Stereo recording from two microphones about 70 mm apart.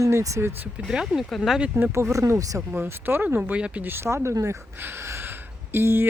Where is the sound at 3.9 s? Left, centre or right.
Right.